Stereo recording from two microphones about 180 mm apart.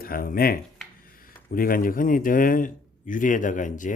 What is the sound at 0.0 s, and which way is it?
Speech, 55° left (ahead or behind).